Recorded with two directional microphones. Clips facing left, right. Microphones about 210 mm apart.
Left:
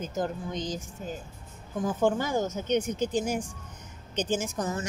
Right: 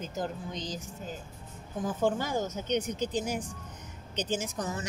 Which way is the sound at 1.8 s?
50° left (ahead or behind).